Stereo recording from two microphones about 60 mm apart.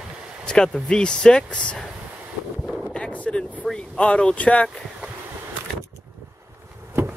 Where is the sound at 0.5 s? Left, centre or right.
Centre.